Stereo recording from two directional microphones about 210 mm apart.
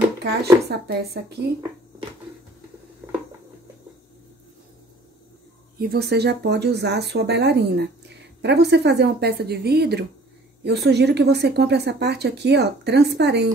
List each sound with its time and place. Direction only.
0.2 s a woman's voice: 50° right (ahead or behind)
5.8 s a woman's voice: 50° right (ahead or behind)